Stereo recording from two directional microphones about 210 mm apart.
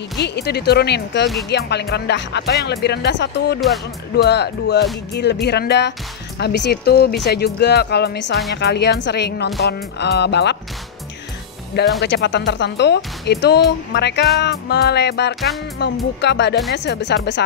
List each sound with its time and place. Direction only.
0.2 s speech: 55° left (ahead or behind)
12.0 s speech: 55° left (ahead or behind)